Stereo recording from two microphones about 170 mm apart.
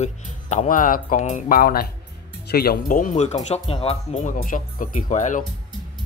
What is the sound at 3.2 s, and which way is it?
Speech, 35° left (ahead or behind).